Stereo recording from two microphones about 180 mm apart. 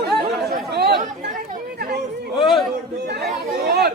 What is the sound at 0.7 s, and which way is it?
Chatter, 65° right (ahead or behind).